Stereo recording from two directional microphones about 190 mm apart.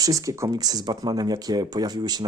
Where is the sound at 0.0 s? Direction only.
15° right (ahead or behind).